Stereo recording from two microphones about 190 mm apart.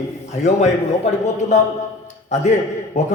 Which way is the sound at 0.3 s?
35° left (ahead or behind).